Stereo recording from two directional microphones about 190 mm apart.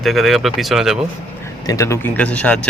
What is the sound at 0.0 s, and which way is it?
Speech, centre (ahead or behind).